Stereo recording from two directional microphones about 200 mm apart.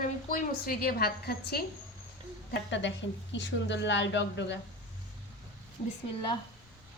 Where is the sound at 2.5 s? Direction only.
65° left (ahead or behind).